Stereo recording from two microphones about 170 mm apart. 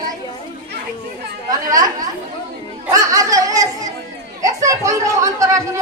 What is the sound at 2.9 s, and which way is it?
Chatter, 20° right (ahead or behind).